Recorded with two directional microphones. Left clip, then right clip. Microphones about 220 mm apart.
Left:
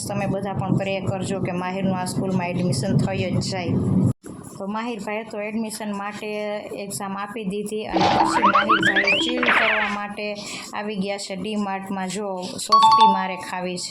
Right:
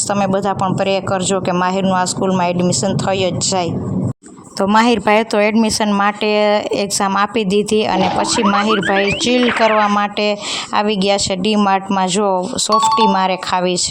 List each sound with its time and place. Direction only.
0.1 s speech: 35° right (ahead or behind)
4.6 s speech: 45° right (ahead or behind)
7.9 s speech: centre (ahead or behind)
9.9 s speech: 40° right (ahead or behind)
12.7 s speech: centre (ahead or behind)
13.1 s speech: 40° right (ahead or behind)